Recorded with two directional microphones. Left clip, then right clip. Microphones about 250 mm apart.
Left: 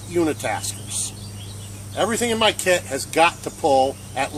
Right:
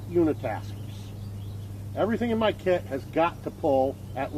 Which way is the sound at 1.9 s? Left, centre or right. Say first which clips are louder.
Left 5 dB; centre.